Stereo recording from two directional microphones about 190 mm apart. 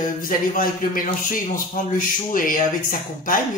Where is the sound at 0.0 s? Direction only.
45° left (ahead or behind).